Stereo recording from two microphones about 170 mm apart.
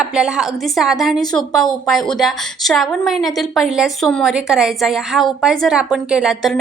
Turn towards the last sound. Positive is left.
turn(degrees=0)  # may be behind; listen again after turning